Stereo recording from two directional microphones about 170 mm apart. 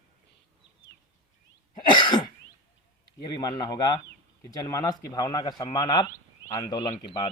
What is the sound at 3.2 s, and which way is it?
A man's voice, 25° left (ahead or behind).